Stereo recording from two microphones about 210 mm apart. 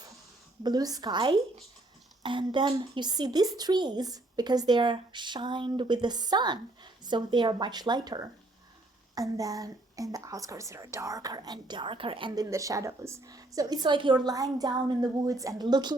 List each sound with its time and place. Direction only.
0.6 s a woman's voice: 20° right (ahead or behind)